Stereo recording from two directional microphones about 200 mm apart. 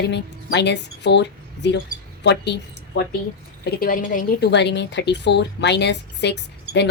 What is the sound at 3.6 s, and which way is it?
Speech, 50° left (ahead or behind).